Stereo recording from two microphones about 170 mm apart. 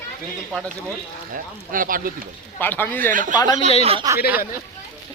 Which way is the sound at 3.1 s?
50° right (ahead or behind).